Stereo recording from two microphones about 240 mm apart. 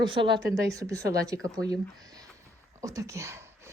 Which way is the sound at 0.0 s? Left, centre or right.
Centre.